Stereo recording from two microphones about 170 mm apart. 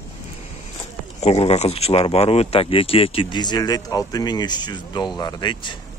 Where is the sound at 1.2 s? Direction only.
40° left (ahead or behind).